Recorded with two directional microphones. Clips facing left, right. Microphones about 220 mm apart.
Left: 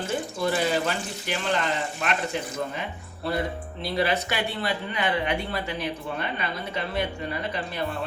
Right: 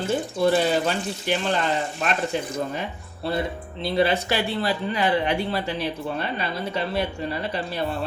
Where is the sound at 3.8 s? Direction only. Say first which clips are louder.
Right 4 dB; 25° right (ahead or behind).